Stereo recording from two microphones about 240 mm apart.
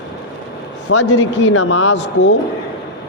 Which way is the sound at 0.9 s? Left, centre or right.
Left.